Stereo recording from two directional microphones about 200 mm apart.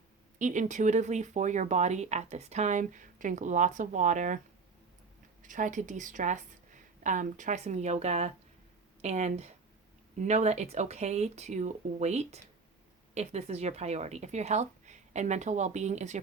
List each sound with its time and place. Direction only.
0.3 s speech: 40° right (ahead or behind)
5.4 s a woman's voice: 40° right (ahead or behind)